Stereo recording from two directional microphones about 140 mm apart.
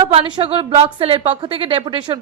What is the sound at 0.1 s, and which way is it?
A woman's voice, 40° right (ahead or behind).